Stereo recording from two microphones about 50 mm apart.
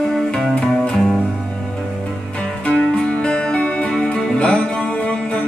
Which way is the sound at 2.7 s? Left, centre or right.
Centre.